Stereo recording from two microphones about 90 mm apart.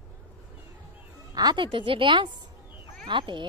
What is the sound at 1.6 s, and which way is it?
A woman's voice, 70° right (ahead or behind).